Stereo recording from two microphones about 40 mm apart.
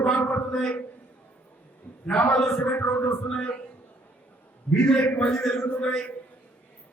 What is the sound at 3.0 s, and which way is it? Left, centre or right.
Music, left.